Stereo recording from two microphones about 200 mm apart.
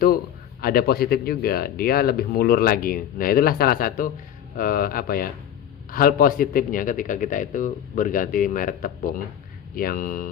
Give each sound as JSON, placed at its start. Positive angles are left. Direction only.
{"t": 0.0, "sound": "a man's voice", "side_deg": 45}